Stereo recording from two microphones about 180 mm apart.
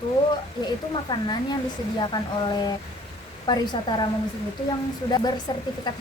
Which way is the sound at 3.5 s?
25° left (ahead or behind).